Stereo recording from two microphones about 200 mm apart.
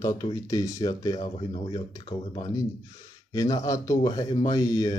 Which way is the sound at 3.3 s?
15° left (ahead or behind).